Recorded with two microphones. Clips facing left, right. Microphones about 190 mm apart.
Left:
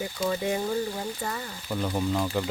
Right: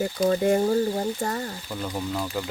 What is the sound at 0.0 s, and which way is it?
Speech, 45° right (ahead or behind).